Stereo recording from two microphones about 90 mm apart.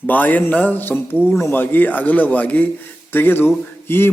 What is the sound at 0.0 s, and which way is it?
A man's voice, 20° left (ahead or behind).